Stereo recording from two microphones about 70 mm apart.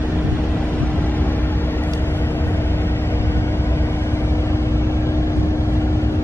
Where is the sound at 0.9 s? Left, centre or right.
Left.